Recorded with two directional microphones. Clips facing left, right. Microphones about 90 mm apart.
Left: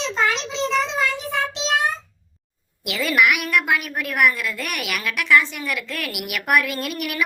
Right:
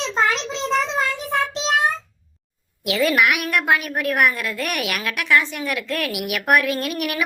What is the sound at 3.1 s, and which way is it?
A woman's voice, 45° right (ahead or behind).